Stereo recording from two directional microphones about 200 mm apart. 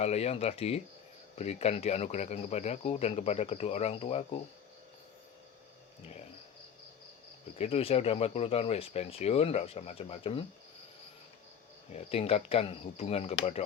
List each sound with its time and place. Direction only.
0.0 s speech: 30° left (ahead or behind)
6.0 s speech: 30° left (ahead or behind)
7.6 s speech: 30° left (ahead or behind)
11.9 s speech: 30° left (ahead or behind)